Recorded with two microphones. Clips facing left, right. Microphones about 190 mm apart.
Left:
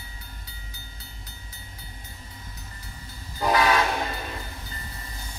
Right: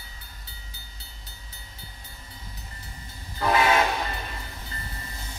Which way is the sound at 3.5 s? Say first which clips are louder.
Even; 25° right (ahead or behind).